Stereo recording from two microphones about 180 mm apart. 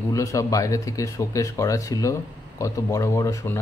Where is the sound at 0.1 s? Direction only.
15° left (ahead or behind).